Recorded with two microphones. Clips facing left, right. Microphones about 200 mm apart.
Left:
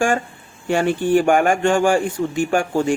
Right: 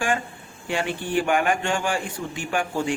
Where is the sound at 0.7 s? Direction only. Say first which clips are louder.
Left 9 dB; 45° left (ahead or behind).